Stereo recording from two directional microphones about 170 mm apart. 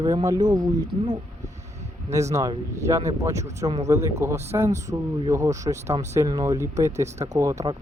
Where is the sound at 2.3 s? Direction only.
20° right (ahead or behind).